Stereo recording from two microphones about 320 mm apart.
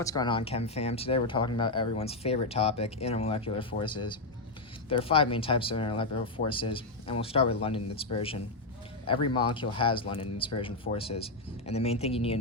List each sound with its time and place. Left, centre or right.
0.0 s speech: centre